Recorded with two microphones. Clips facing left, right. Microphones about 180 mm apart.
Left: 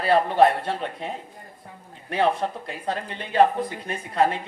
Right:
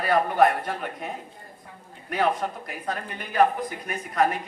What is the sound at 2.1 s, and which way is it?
A man's voice, 30° left (ahead or behind).